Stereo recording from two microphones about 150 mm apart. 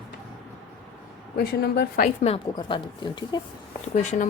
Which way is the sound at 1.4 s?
90° left.